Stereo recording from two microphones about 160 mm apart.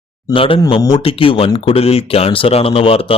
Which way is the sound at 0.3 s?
35° left (ahead or behind).